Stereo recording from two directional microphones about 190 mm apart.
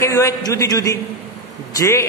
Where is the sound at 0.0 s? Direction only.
15° left (ahead or behind).